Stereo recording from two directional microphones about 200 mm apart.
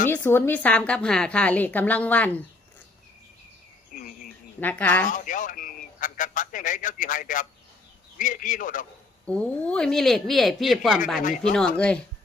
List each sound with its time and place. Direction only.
0.1 s a woman's voice: 10° left (ahead or behind)
3.9 s cricket: 40° left (ahead or behind)
4.6 s a woman's voice: 5° left (ahead or behind)
5.0 s a man's voice: 40° left (ahead or behind)
9.2 s speech: 5° left (ahead or behind)
11.2 s a man's voice: 40° left (ahead or behind)
11.5 s speech: 5° left (ahead or behind)